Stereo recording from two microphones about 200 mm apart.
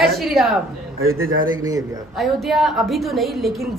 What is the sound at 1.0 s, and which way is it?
Speech, 90° right.